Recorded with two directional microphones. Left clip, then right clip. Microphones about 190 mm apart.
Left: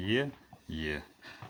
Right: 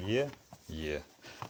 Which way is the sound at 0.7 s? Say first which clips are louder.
Left 1 dB; 30° right (ahead or behind).